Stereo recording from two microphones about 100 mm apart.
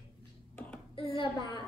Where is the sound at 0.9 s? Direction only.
60° left (ahead or behind).